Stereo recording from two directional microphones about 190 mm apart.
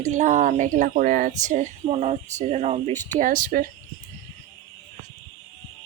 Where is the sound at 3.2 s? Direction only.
45° right (ahead or behind).